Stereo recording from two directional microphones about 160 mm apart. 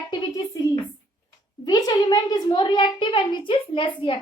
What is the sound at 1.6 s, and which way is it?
A child's voice, 25° left (ahead or behind).